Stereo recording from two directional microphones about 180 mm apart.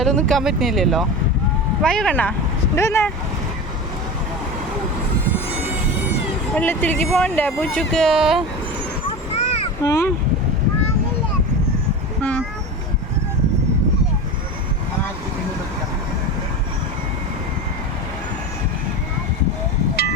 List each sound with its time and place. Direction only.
0.0 s speech: 5° left (ahead or behind)
6.6 s speech: 10° left (ahead or behind)
9.3 s a sound: 35° left (ahead or behind)
9.8 s speech: 15° left (ahead or behind)